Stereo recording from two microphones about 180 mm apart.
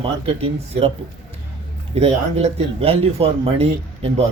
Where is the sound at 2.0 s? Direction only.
35° right (ahead or behind).